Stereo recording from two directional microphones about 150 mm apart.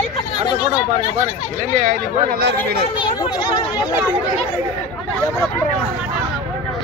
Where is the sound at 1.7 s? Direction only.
70° right (ahead or behind).